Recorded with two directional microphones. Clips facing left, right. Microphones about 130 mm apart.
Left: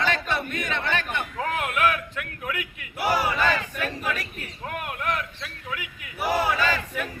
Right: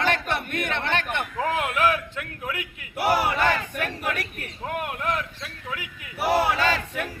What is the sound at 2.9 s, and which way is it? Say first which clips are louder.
Speech: right 2 dB; 60° right (ahead or behind).